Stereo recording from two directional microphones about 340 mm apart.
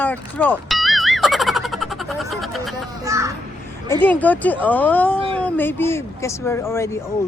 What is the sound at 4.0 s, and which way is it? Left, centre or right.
Speech, centre.